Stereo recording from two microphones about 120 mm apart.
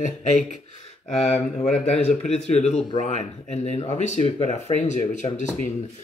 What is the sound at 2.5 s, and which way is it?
Speech, 65° left (ahead or behind).